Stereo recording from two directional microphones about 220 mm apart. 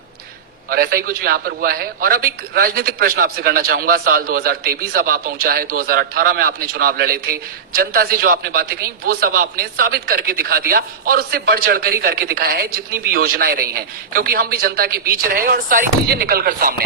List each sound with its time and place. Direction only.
0.7 s a man's voice: 45° right (ahead or behind)